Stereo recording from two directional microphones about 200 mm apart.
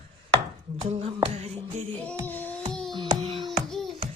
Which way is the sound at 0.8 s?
30° right (ahead or behind).